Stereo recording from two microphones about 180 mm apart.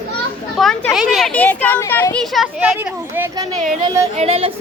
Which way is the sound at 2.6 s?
10° right (ahead or behind).